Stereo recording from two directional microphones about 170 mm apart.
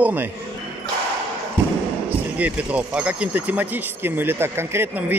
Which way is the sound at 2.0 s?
10° right (ahead or behind).